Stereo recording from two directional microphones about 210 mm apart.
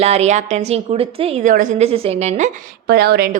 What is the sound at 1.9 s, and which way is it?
Speech, 30° right (ahead or behind).